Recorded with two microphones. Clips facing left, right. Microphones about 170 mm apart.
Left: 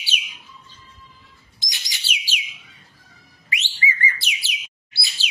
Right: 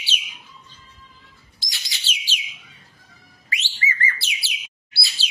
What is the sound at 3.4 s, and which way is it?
Bird, 15° left (ahead or behind).